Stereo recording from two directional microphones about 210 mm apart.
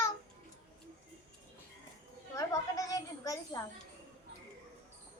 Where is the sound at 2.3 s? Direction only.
15° left (ahead or behind).